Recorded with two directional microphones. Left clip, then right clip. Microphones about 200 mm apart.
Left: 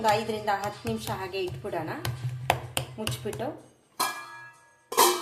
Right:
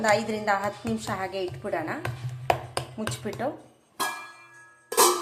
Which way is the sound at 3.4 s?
10° right (ahead or behind).